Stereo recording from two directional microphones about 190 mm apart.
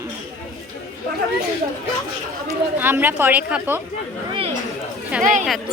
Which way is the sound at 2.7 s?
10° right (ahead or behind).